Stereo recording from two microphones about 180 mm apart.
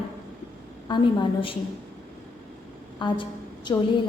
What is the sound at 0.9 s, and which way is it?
Speech, 25° left (ahead or behind).